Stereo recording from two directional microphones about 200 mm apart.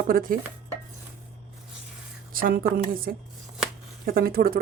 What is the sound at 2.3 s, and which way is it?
Speech, 45° right (ahead or behind).